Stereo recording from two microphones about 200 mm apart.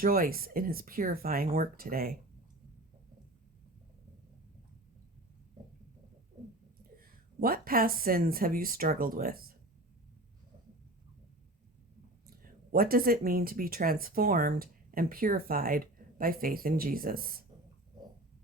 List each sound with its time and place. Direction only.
0.0 s speech: 45° right (ahead or behind)
7.0 s speech: 45° right (ahead or behind)
12.3 s speech: 45° right (ahead or behind)